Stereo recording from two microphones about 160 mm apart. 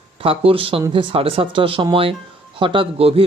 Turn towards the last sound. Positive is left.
turn(degrees=-35)  # may be behind; listen again after turning